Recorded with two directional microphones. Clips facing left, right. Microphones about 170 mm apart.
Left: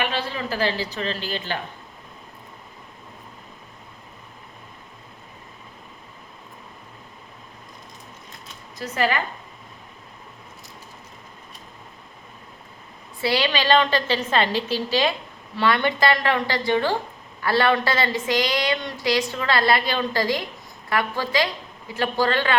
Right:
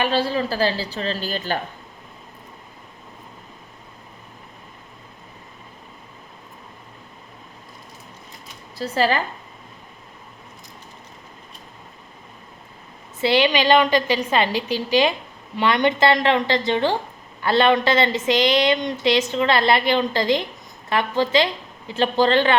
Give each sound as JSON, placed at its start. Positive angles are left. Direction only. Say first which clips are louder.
{"t": 0.0, "sound": "a woman's voice", "louder": "right 6 dB", "side_deg": -35}
{"t": 8.8, "sound": "a woman's voice", "louder": "right 3 dB", "side_deg": -30}
{"t": 13.2, "sound": "a woman's voice", "louder": "right 4 dB", "side_deg": -20}